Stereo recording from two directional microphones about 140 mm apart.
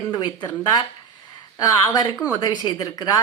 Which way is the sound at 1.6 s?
25° left (ahead or behind).